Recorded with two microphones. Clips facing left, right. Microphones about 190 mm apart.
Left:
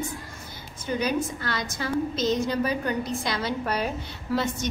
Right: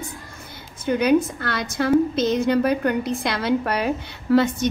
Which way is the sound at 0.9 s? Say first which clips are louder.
Right 8 dB; 60° right (ahead or behind).